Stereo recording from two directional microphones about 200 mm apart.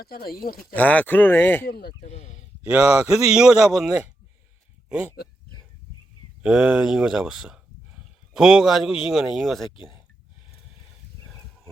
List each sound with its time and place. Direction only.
0.0 s speech: 50° left (ahead or behind)
0.6 s speech: 5° left (ahead or behind)
1.6 s speech: 55° left (ahead or behind)
2.0 s speech: 35° left (ahead or behind)
2.6 s a man's voice: 5° right (ahead or behind)
6.4 s speech: 5° right (ahead or behind)